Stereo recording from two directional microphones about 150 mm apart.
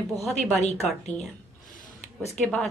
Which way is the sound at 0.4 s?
45° left (ahead or behind).